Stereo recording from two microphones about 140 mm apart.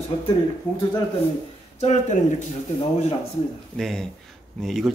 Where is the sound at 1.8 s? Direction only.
55° left (ahead or behind).